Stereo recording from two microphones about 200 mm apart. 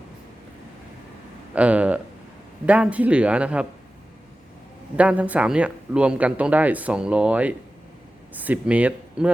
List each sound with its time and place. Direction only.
1.5 s speech: 5° right (ahead or behind)
4.9 s speech: 5° right (ahead or behind)